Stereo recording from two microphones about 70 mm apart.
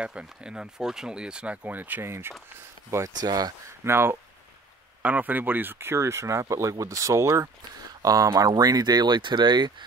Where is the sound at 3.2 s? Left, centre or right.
Right.